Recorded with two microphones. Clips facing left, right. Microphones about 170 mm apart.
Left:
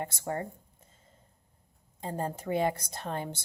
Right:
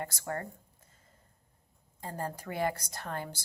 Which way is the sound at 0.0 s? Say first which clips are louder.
Left 3 dB; 20° left (ahead or behind).